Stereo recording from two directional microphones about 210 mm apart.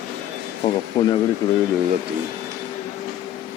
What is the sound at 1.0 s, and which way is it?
Speech, 20° left (ahead or behind).